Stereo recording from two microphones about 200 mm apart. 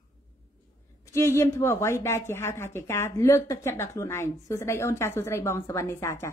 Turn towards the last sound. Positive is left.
turn(degrees=15)  # may be behind; listen again after turning